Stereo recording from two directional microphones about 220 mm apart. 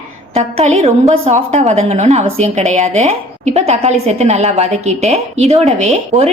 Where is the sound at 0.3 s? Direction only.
30° right (ahead or behind).